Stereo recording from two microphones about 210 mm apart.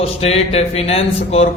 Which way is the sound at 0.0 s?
30° left (ahead or behind).